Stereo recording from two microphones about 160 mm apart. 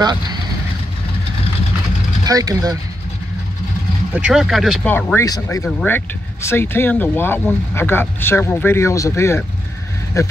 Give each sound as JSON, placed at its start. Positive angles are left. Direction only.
{"t": 0.0, "sound": "speech", "side_deg": -25}
{"t": 2.2, "sound": "speech", "side_deg": -20}
{"t": 4.1, "sound": "speech", "side_deg": -5}
{"t": 4.9, "sound": "speech", "side_deg": 15}
{"t": 5.7, "sound": "speech", "side_deg": 10}